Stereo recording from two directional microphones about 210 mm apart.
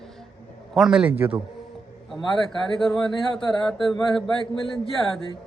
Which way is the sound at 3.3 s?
5° left (ahead or behind).